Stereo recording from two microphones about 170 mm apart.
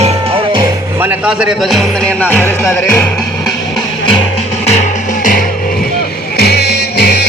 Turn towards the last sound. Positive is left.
turn(degrees=70)  # may be behind; listen again after turning